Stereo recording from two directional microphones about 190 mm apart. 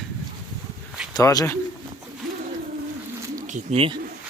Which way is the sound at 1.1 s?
20° left (ahead or behind).